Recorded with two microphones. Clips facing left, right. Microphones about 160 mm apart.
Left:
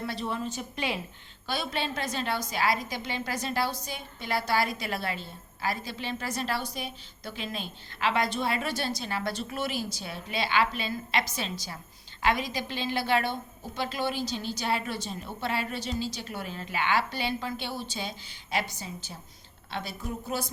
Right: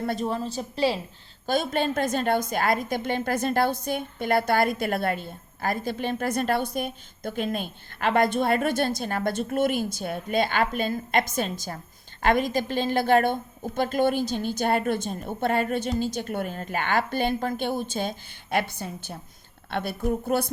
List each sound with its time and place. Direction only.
0.0 s a woman's voice: 50° right (ahead or behind)
1.5 s a woman's voice: 45° right (ahead or behind)